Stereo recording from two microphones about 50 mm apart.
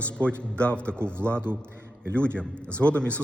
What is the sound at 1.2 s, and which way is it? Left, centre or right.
Speech, right.